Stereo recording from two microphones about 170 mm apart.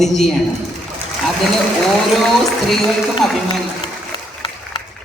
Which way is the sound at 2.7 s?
Centre (ahead or behind).